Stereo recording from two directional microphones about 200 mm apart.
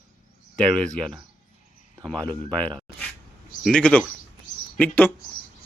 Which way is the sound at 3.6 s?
5° left (ahead or behind).